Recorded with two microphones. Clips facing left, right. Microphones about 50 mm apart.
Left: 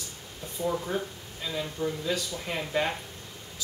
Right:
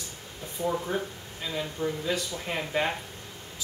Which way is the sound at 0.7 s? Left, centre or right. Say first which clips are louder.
Right 1 dB; centre.